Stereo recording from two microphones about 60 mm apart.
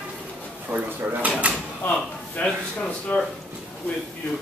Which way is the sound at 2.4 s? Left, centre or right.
Centre.